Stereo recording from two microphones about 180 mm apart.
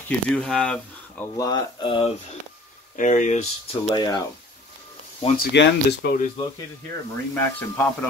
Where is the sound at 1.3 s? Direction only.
20° left (ahead or behind).